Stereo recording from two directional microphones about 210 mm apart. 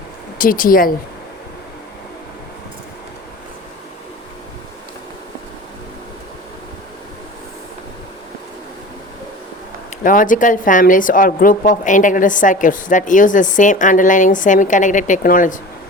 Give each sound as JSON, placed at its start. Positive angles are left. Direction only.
{"t": 0.3, "sound": "speech", "side_deg": 40}
{"t": 10.0, "sound": "a woman's voice", "side_deg": 40}